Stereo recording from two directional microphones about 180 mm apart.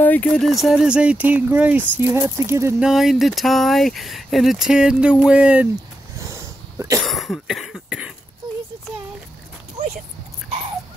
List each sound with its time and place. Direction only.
0.0 s speech: 10° left (ahead or behind); by 2.9 s 15° right (ahead or behind)
2.9 s speech: centre (ahead or behind)
6.1 s cough: 15° right (ahead or behind)
7.0 s cough: centre (ahead or behind)
9.8 s a sound: 35° right (ahead or behind)